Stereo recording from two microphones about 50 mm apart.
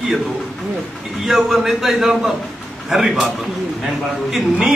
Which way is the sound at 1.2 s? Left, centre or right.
Centre.